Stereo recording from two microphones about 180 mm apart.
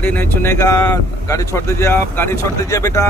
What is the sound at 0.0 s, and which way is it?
Speech, 10° left (ahead or behind).